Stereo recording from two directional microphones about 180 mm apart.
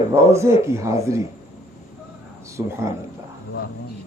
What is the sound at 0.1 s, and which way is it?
A man's voice, 15° right (ahead or behind).